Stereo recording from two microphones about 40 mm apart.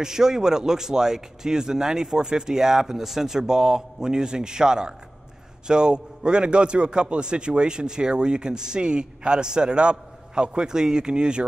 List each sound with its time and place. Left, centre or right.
0.0 s a man's voice: centre